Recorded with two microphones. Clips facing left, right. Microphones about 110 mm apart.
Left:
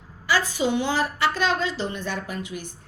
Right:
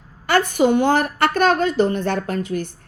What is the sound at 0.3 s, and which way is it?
A woman's voice, 60° right (ahead or behind).